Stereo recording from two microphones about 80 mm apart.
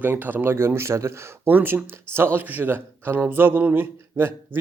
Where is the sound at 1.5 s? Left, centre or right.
Right.